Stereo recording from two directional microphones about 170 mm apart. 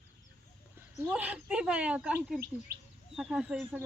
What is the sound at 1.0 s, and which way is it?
Speech, 10° right (ahead or behind).